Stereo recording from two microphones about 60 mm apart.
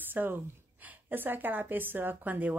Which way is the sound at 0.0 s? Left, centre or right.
Right.